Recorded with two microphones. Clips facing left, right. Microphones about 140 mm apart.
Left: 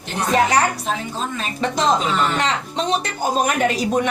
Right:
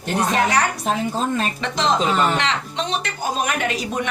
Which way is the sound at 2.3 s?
40° left (ahead or behind).